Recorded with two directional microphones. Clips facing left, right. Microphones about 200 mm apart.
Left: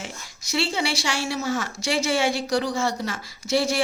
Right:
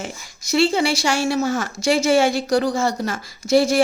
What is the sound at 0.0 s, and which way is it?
Speech, 45° right (ahead or behind).